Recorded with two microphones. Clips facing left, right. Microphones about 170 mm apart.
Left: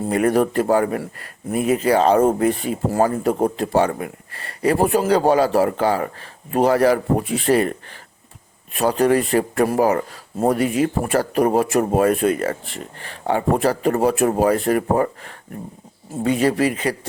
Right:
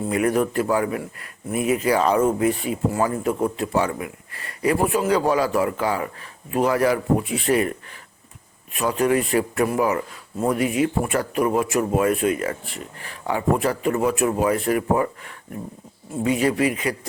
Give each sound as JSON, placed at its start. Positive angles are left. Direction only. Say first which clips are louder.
{"t": 0.1, "sound": "speech", "louder": "left 4 dB", "side_deg": 35}